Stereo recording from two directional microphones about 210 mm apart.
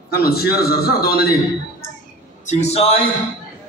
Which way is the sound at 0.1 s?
45° left (ahead or behind).